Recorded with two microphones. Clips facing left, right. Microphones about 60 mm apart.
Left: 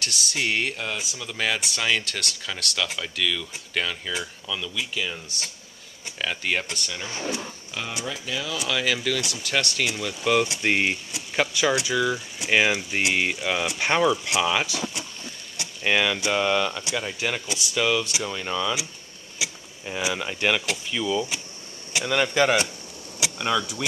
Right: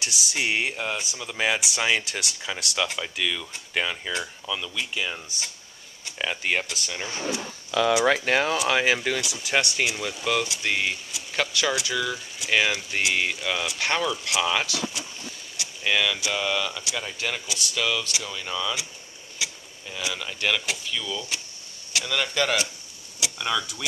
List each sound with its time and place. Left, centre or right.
0.0 s speech: centre
7.9 s speech: right
8.5 s speech: right
8.7 s speech: right
9.3 s speech: centre
10.2 s speech: centre
10.6 s speech: centre
15.8 s a man's voice: centre